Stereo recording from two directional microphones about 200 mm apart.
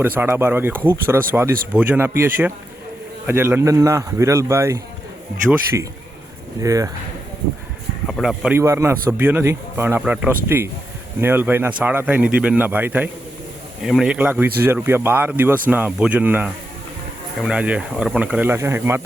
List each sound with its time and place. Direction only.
0.0 s speech: 10° right (ahead or behind)
6.6 s speech: 15° right (ahead or behind)
8.0 s speech: centre (ahead or behind)